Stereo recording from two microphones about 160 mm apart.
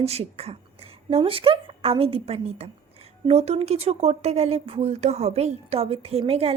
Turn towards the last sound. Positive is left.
turn(degrees=-40)  # may be behind; listen again after turning